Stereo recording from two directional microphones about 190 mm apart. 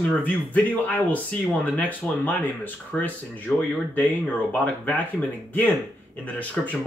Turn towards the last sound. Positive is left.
turn(degrees=10)  # may be behind; listen again after turning